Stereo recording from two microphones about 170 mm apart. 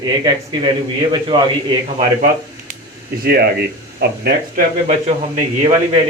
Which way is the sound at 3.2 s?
65° right (ahead or behind).